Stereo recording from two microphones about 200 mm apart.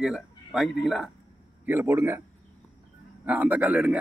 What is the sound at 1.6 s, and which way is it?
Speech, 10° right (ahead or behind).